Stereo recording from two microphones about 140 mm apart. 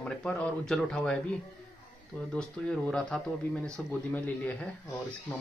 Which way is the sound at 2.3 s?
5° left (ahead or behind).